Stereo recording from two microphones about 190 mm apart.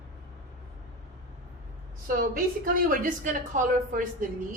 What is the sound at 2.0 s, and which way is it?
A man's voice, 45° right (ahead or behind).